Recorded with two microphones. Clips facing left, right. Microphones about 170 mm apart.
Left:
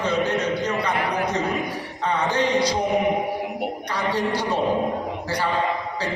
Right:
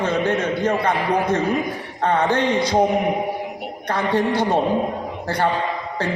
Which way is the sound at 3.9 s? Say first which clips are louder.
Right 5 dB; 55° right (ahead or behind).